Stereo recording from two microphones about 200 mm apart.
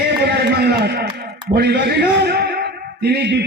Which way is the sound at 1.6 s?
55° right (ahead or behind).